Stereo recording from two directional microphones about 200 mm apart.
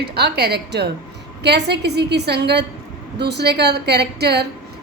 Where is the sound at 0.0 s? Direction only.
55° right (ahead or behind).